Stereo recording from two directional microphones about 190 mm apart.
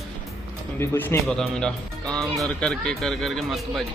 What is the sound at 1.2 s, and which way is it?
Speech, centre (ahead or behind).